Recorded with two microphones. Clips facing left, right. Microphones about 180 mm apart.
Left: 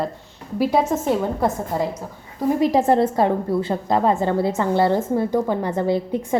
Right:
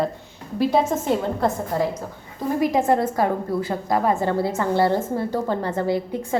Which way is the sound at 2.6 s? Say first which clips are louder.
Left 2 dB; 35° left (ahead or behind).